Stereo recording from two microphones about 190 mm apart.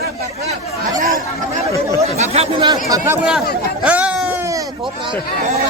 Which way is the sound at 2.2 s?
30° right (ahead or behind).